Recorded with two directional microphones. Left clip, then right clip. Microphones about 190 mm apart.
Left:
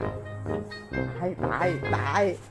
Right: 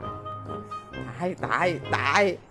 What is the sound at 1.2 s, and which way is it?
Music, 20° right (ahead or behind).